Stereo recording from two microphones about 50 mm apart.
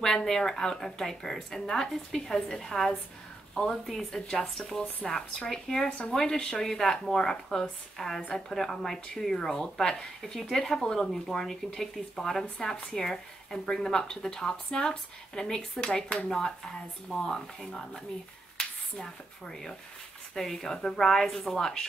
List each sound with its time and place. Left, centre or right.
0.0 s speech: centre
4.1 s speech: centre
5.9 s speech: left